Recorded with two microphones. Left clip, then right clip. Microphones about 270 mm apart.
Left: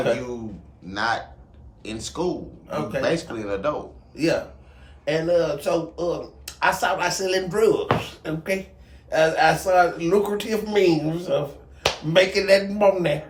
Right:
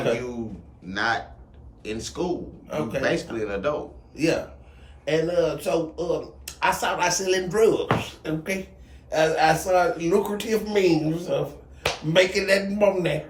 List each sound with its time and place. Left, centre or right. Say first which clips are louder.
0.9 s speech: even; centre